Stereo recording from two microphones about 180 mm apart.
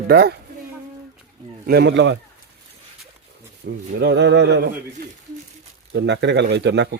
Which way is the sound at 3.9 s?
70° right (ahead or behind).